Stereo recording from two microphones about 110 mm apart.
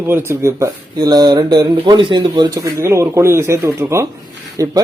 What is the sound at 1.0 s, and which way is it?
Speech, 40° right (ahead or behind).